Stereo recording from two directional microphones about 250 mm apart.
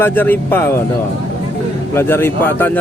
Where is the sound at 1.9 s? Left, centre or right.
Centre.